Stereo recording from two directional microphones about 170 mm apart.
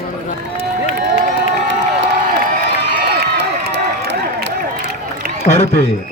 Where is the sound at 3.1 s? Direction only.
70° right (ahead or behind); by 4.5 s 90° right.